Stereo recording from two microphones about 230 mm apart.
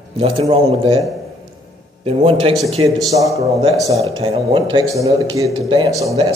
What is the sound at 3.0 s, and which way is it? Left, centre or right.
A man's voice, centre.